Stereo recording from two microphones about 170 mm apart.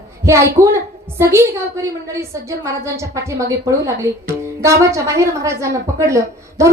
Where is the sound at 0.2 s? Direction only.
15° right (ahead or behind).